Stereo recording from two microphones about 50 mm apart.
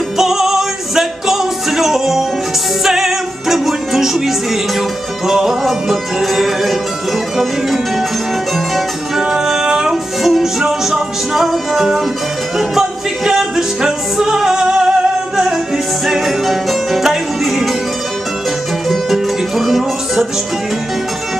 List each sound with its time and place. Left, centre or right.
0.2 s music: centre
8.5 s music: centre
18.9 s music: centre